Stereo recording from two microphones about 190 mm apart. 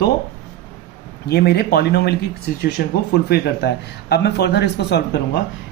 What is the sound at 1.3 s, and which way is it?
Speech, 60° left (ahead or behind).